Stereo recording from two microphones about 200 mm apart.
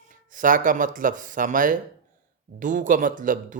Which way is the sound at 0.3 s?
40° right (ahead or behind).